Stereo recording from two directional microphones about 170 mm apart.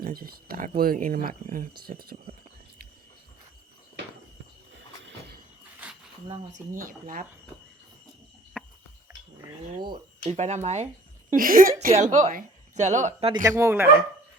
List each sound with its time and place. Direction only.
0.0 s speech: 60° right (ahead or behind)
4.7 s a sound: 90° right
6.5 s speech: 55° right (ahead or behind)
8.6 s a sound: 5° right (ahead or behind)
10.2 s speech: 40° right (ahead or behind)
11.3 s a woman's voice: 55° right (ahead or behind)
13.1 s speech: 30° right (ahead or behind)
13.4 s speech: 20° right (ahead or behind)